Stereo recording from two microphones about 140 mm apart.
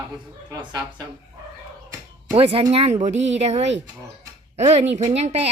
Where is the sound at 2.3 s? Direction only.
45° right (ahead or behind).